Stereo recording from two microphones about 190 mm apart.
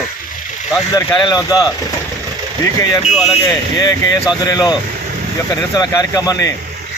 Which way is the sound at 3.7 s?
20° left (ahead or behind).